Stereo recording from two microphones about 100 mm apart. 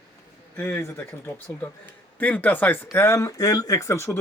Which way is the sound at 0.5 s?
20° left (ahead or behind).